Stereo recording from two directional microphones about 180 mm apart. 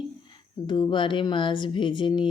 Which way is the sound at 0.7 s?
25° left (ahead or behind).